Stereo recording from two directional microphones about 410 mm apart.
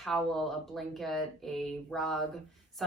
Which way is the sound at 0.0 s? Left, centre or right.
Centre.